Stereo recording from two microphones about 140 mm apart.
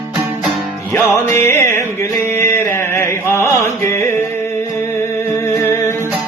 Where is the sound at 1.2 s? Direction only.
20° left (ahead or behind).